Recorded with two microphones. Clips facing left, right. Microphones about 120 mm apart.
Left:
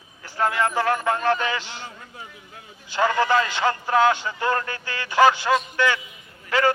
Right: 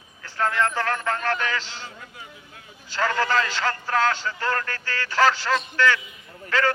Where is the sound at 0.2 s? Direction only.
15° left (ahead or behind).